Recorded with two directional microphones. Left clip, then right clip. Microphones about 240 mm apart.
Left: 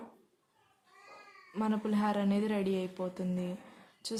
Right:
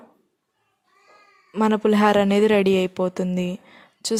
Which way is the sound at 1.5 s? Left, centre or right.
Right.